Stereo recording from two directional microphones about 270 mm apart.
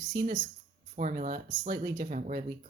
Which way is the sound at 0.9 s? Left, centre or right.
Right.